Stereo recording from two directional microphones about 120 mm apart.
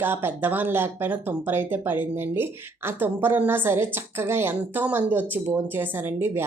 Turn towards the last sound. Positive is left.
turn(degrees=-20)  # may be behind; listen again after turning